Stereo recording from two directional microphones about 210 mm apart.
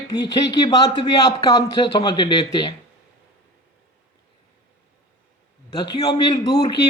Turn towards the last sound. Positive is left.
turn(degrees=20)  # may be behind; listen again after turning